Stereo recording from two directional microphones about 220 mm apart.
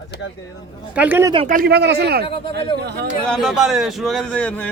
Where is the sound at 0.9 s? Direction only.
10° right (ahead or behind).